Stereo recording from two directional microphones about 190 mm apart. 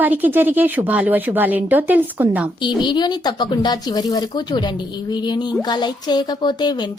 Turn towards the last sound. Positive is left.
turn(degrees=20)  # may be behind; listen again after turning